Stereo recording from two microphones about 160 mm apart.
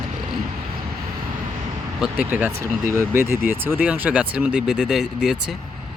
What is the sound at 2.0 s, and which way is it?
Speech, 10° right (ahead or behind).